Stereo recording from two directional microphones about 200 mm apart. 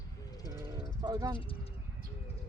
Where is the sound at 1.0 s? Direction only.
20° right (ahead or behind).